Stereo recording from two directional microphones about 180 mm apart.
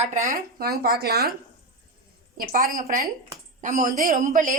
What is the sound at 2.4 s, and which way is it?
A woman's voice, 50° right (ahead or behind).